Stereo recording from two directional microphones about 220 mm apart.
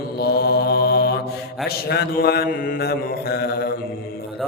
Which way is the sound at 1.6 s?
45° left (ahead or behind).